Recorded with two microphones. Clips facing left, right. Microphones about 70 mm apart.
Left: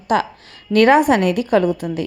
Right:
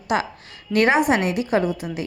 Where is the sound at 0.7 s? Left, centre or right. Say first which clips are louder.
Left 5 dB; left.